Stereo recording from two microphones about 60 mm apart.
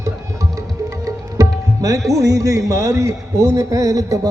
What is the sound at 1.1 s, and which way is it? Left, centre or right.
Tabla, right.